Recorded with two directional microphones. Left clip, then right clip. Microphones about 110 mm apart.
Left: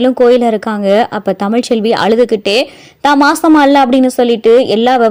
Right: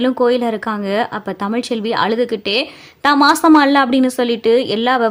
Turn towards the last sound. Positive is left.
turn(degrees=35)  # may be behind; listen again after turning